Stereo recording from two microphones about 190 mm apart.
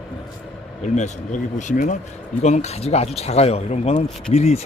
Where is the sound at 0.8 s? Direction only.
40° left (ahead or behind).